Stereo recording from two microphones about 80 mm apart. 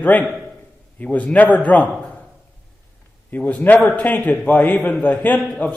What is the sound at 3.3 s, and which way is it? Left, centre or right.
A man's voice, centre.